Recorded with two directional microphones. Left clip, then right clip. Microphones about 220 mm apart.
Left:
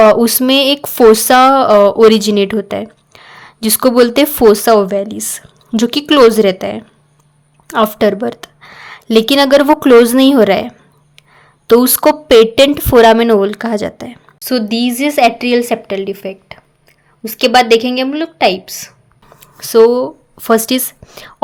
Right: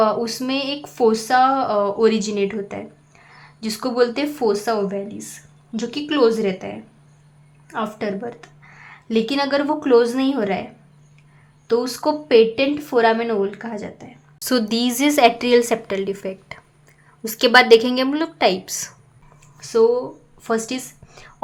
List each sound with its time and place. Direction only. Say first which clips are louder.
0.0 s speech: left 11 dB; 40° left (ahead or behind)
11.7 s speech: left 11 dB; 40° left (ahead or behind)
14.3 s a woman's voice: left 5 dB; 10° left (ahead or behind)
19.4 s speech: left 9 dB; 35° left (ahead or behind)